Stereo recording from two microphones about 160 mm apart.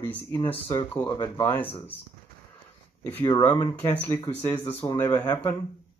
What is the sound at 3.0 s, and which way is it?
Speech, 10° left (ahead or behind).